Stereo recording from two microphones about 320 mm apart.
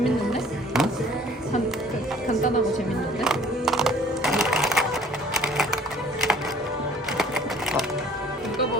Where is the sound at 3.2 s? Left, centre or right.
Centre.